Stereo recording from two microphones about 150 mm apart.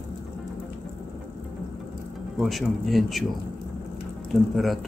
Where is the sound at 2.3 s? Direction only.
Centre (ahead or behind).